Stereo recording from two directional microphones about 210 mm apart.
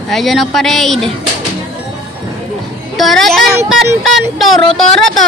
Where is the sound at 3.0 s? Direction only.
Centre (ahead or behind).